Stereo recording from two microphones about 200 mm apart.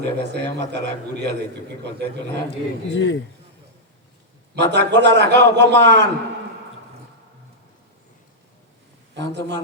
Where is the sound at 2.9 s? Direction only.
60° left (ahead or behind).